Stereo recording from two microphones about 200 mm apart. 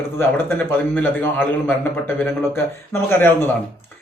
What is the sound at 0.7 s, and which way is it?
Speech, 10° left (ahead or behind).